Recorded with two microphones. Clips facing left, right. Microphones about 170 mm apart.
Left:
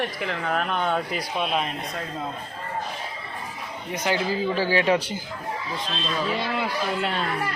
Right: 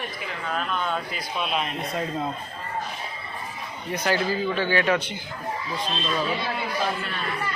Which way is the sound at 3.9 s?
15° left (ahead or behind).